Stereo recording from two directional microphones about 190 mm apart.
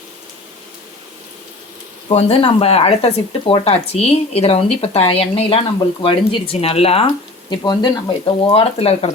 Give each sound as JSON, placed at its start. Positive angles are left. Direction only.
{"t": 2.0, "sound": "speech", "side_deg": 30}